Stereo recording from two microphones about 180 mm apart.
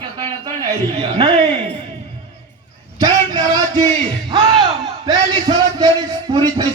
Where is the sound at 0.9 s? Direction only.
30° right (ahead or behind).